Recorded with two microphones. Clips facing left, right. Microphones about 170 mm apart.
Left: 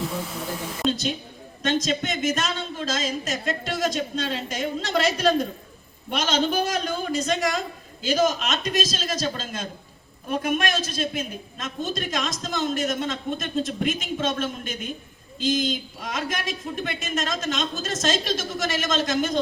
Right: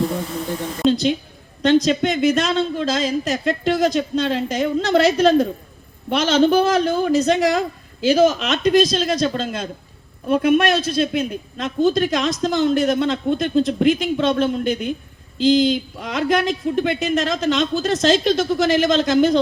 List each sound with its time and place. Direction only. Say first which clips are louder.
1.6 s a man's voice: right 9 dB; 60° right (ahead or behind)